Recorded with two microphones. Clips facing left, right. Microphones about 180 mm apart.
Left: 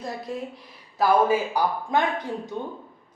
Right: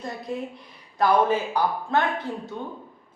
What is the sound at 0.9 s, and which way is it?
A man's voice, 5° left (ahead or behind).